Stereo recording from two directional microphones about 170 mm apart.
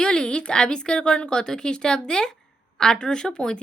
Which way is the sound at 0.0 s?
5° left (ahead or behind).